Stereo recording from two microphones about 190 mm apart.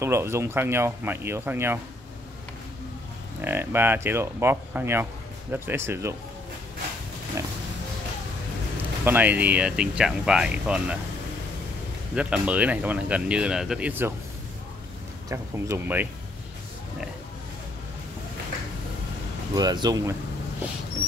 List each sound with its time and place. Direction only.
0.0 s speech: 15° right (ahead or behind)
3.3 s speech: 10° right (ahead or behind)
9.0 s speech: 10° right (ahead or behind)
12.2 s speech: 5° right (ahead or behind)
15.2 s speech: 15° right (ahead or behind)
19.5 s speech: 20° right (ahead or behind)